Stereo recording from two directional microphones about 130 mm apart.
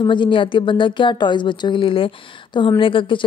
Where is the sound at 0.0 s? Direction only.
40° left (ahead or behind).